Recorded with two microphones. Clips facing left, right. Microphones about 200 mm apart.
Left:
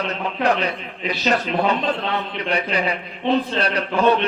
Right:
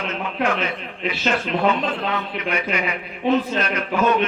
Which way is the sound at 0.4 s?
35° left (ahead or behind).